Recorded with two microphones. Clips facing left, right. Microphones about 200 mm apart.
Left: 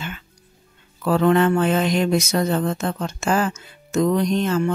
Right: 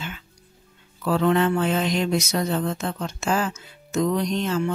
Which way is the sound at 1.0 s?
55° left (ahead or behind).